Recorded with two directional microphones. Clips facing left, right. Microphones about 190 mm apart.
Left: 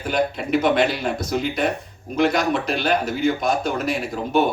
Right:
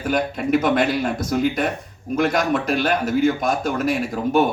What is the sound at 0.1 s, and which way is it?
A man's voice, 50° right (ahead or behind).